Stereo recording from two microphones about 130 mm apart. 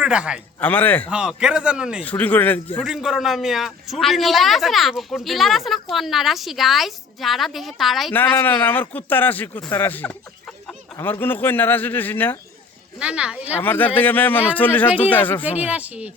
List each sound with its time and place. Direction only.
0.0 s a man's voice: 5° right (ahead or behind)
0.6 s a man's voice: 15° left (ahead or behind)
1.1 s a man's voice: 5° right (ahead or behind)
2.0 s a man's voice: 10° left (ahead or behind)
2.8 s a man's voice: 5° right (ahead or behind)
8.1 s a man's voice: 15° left (ahead or behind)
13.0 s a man's voice: 10° right (ahead or behind)
13.6 s a man's voice: 15° left (ahead or behind)
15.6 s a man's voice: 10° right (ahead or behind)